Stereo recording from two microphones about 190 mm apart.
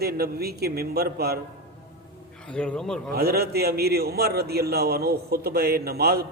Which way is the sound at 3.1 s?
55° right (ahead or behind).